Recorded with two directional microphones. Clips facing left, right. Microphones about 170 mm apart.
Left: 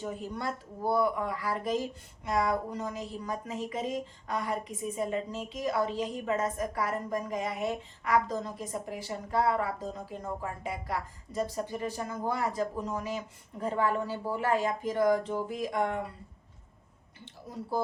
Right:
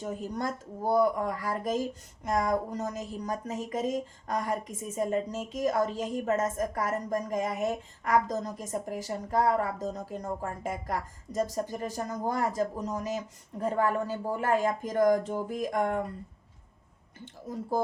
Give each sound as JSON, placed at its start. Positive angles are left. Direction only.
{"t": 0.0, "sound": "speech", "side_deg": -45}